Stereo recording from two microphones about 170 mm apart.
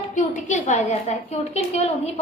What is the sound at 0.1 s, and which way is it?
A woman's voice, 45° left (ahead or behind).